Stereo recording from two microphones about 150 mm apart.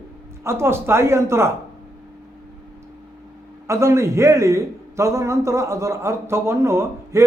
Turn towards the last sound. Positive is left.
turn(degrees=-20)  # may be behind; listen again after turning